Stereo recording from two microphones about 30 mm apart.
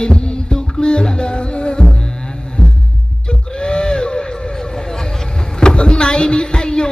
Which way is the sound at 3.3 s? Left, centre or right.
Left.